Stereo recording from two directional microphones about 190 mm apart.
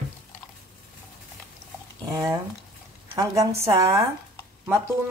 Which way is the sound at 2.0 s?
15° right (ahead or behind).